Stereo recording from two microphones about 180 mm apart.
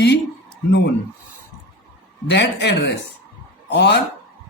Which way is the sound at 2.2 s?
75° left (ahead or behind).